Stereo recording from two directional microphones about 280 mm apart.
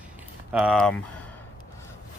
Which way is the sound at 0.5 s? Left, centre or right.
Centre.